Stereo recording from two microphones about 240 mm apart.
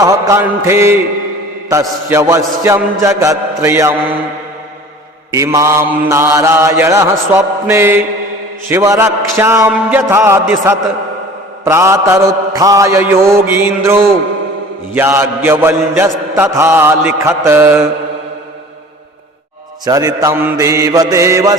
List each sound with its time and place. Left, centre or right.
0.0 s mantra: centre
5.3 s mantra: centre
19.8 s mantra: centre